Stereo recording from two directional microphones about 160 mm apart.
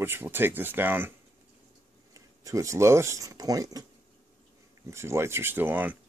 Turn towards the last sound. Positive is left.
turn(degrees=-10)  # may be behind; listen again after turning